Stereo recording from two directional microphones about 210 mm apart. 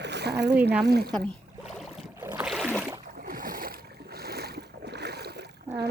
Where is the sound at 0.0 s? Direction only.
55° right (ahead or behind).